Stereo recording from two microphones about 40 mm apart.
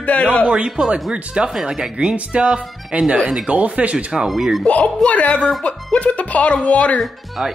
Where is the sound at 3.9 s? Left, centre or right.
Centre.